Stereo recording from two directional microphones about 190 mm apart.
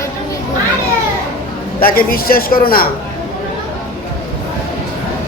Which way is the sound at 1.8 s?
50° left (ahead or behind).